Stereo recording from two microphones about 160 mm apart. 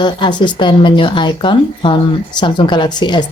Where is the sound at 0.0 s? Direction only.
30° left (ahead or behind).